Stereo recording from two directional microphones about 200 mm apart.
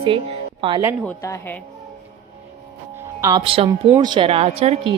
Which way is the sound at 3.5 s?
30° right (ahead or behind).